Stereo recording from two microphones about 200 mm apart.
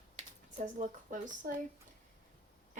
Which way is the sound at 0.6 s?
40° right (ahead or behind).